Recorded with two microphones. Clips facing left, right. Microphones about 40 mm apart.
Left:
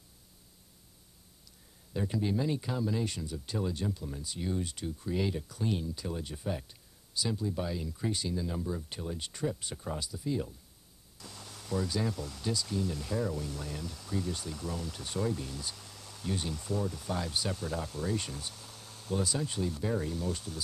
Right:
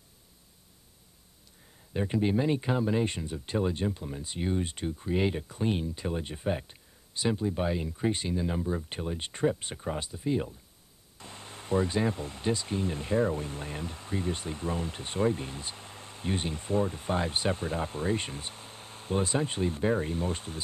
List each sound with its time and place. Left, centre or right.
2.0 s speech: right